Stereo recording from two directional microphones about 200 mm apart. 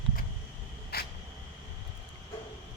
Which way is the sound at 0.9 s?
50° left (ahead or behind).